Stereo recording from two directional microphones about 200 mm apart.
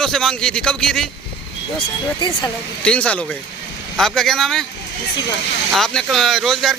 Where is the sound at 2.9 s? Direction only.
5° left (ahead or behind).